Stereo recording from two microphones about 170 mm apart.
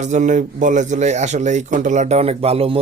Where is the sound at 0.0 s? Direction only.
45° right (ahead or behind).